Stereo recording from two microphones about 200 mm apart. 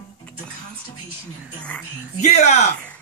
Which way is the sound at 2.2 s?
35° left (ahead or behind).